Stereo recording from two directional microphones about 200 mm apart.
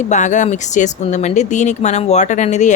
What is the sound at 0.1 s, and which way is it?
Speech, 35° left (ahead or behind).